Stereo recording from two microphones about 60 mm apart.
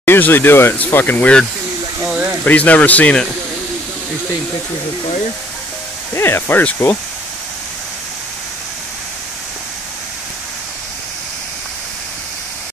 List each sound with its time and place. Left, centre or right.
0.0 s speech: left
2.4 s speech: left
6.1 s speech: left
6.8 s speech: left